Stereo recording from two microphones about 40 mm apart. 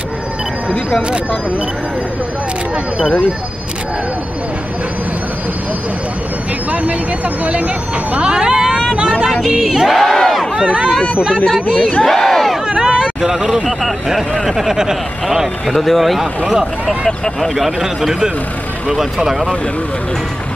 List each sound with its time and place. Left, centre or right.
6.7 s speech: right
8.3 s speech: centre
9.7 s speech: centre
10.0 s speech: centre
10.5 s speech: centre
11.3 s speech: centre
12.0 s a sound: centre
12.6 s a sound: centre
13.7 s speech: centre
15.7 s speech: centre
16.4 s speech: centre
17.4 s speech: centre
17.7 s speech: centre